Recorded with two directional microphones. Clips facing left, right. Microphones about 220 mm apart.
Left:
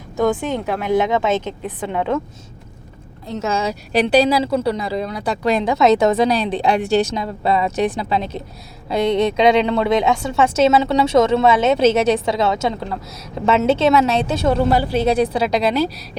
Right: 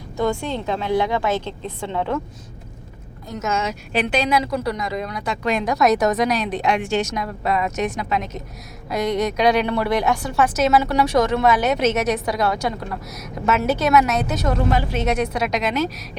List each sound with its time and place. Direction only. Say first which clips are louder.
0.3 s a woman's voice: left 3 dB; 15° left (ahead or behind)
3.2 s a woman's voice: left 3 dB; 30° left (ahead or behind)